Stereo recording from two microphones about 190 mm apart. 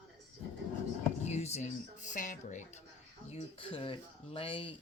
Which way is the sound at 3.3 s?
30° left (ahead or behind).